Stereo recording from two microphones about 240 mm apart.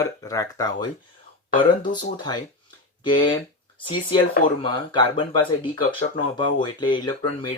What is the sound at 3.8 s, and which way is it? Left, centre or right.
Speech, centre.